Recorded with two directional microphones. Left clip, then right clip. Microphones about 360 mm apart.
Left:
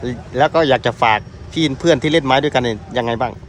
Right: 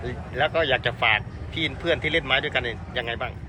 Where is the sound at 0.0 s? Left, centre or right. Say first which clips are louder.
Left 9 dB; left.